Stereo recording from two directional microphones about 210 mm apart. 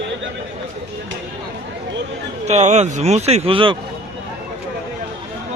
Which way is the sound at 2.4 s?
35° right (ahead or behind).